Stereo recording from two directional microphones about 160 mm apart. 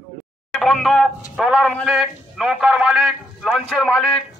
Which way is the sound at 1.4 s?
Centre (ahead or behind).